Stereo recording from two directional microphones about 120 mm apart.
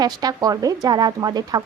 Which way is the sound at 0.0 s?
35° right (ahead or behind).